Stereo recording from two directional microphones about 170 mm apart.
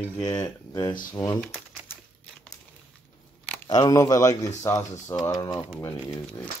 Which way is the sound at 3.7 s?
20° left (ahead or behind).